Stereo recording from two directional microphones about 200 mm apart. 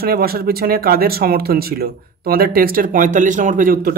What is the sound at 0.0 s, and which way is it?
Speech, 50° right (ahead or behind).